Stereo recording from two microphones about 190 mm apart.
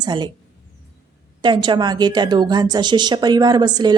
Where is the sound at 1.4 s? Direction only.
25° right (ahead or behind).